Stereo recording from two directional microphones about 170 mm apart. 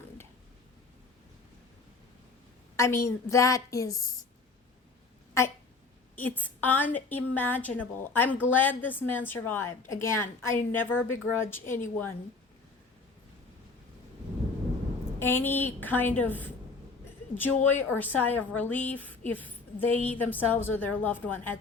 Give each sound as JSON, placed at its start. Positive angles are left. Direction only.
{"t": 2.7, "sound": "a woman's voice", "side_deg": 15}
{"t": 6.1, "sound": "a woman's voice", "side_deg": 10}
{"t": 15.2, "sound": "a woman's voice", "side_deg": 10}